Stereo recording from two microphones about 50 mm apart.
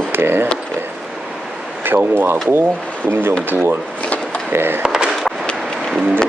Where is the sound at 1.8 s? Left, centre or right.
Right.